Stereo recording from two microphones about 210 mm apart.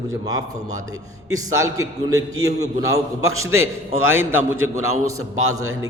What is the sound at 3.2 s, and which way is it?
A man's voice, 85° right.